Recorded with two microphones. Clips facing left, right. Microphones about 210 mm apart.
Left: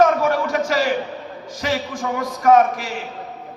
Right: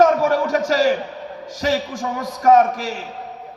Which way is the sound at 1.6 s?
40° right (ahead or behind).